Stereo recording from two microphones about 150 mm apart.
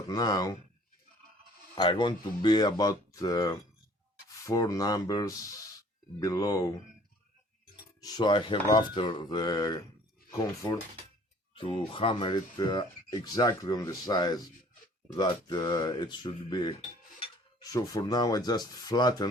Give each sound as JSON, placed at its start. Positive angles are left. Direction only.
{"t": 0.1, "sound": "speech", "side_deg": 25}
{"t": 1.7, "sound": "speech", "side_deg": 30}
{"t": 8.0, "sound": "speech", "side_deg": 25}
{"t": 11.5, "sound": "speech", "side_deg": 35}